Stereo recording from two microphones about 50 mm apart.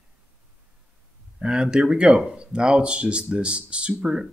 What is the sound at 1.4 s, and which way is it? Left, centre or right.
Speech, centre.